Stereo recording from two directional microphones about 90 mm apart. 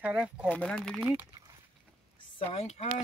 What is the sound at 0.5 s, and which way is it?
Speech, 10° left (ahead or behind).